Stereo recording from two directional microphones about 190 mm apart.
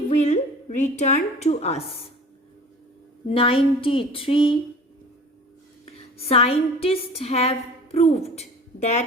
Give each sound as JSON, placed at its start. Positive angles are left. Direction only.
{"t": 0.2, "sound": "a woman's voice", "side_deg": 40}
{"t": 3.2, "sound": "speech", "side_deg": 30}
{"t": 5.8, "sound": "a woman's voice", "side_deg": 30}